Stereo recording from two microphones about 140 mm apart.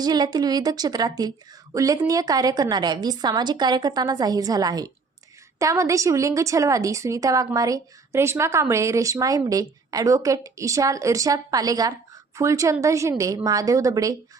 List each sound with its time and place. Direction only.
0.0 s a woman's voice: 30° right (ahead or behind)